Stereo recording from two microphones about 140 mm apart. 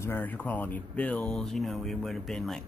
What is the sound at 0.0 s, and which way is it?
Speech, 15° left (ahead or behind).